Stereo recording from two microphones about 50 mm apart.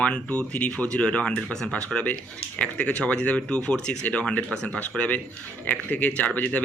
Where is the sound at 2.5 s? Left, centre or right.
Left.